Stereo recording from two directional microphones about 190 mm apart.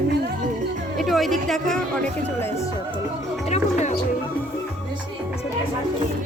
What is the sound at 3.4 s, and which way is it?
Music, 35° left (ahead or behind).